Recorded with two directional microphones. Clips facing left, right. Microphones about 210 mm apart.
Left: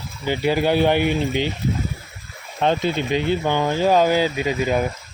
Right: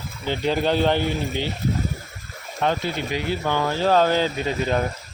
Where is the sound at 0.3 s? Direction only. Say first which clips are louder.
Left 3 dB; 10° left (ahead or behind).